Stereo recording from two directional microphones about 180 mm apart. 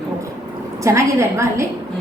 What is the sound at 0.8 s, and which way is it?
Speech, 15° right (ahead or behind).